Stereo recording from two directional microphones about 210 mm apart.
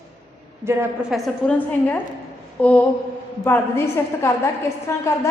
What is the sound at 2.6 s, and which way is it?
A woman's voice, 5° left (ahead or behind).